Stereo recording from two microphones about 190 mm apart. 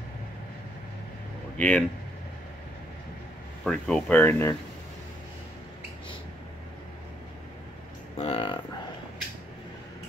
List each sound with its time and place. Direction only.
1.6 s speech: 5° left (ahead or behind)
3.6 s speech: 5° left (ahead or behind)
8.2 s a sound: 30° left (ahead or behind)